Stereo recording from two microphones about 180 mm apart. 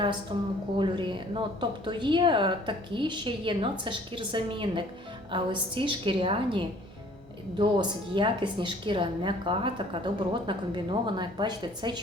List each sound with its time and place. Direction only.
0.8 s a woman's voice: 25° right (ahead or behind)